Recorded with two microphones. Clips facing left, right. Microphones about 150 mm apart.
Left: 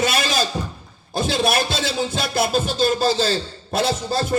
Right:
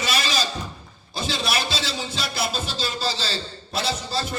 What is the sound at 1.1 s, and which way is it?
Music, 50° left (ahead or behind).